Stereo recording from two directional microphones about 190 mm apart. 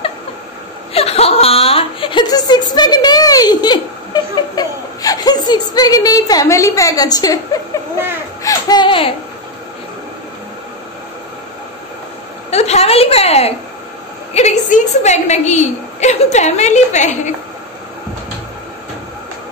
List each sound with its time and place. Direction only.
0.9 s a woman's voice: 30° left (ahead or behind)
8.5 s speech: 20° left (ahead or behind)
12.4 s a woman's voice: 35° left (ahead or behind)